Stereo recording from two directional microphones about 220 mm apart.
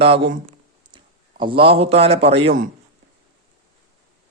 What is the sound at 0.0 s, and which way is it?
A man's voice, 25° right (ahead or behind).